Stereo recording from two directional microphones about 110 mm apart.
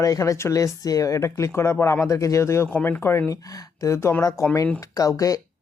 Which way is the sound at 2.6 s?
15° left (ahead or behind).